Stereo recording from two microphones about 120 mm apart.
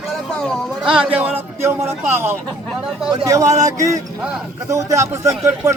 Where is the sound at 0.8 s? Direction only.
5° right (ahead or behind).